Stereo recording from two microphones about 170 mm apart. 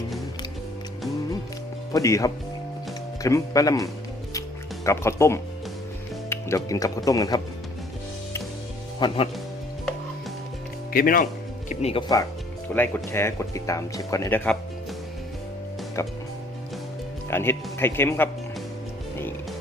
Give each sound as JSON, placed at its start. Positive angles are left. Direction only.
{"t": 1.9, "sound": "speech", "side_deg": 20}
{"t": 4.9, "sound": "speech", "side_deg": 15}
{"t": 9.0, "sound": "speech", "side_deg": 30}
{"t": 10.9, "sound": "speech", "side_deg": 55}
{"t": 11.7, "sound": "speech", "side_deg": 40}
{"t": 12.7, "sound": "speech", "side_deg": 10}
{"t": 16.0, "sound": "speech", "side_deg": 15}
{"t": 17.3, "sound": "speech", "side_deg": 15}